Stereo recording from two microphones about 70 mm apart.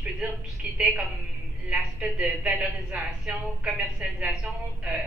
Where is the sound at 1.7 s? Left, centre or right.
Centre.